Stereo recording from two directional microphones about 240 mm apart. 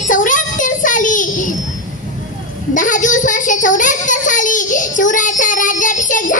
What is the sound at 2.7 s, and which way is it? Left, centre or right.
A child's voice, left.